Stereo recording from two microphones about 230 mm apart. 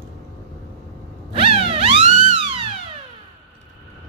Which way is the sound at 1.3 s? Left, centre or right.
Right.